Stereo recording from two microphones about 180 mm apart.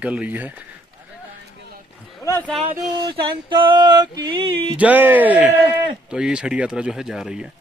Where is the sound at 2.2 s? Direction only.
15° left (ahead or behind).